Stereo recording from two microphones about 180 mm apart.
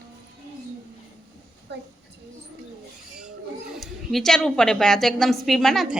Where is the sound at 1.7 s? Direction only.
70° right (ahead or behind).